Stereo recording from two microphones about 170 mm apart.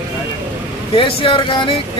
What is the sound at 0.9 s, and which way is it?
Speech, 35° left (ahead or behind).